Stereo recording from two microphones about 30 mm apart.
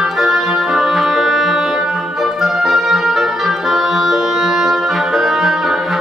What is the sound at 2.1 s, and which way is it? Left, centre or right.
Music, centre.